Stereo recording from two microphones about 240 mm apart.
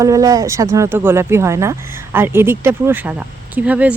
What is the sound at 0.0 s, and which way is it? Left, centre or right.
Speech, centre.